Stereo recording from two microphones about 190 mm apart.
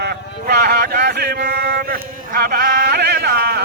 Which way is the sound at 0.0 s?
55° right (ahead or behind).